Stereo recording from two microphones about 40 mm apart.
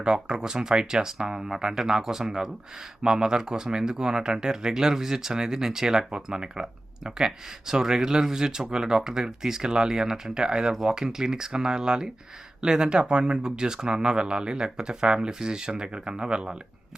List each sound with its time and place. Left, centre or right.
0.0 s speech: centre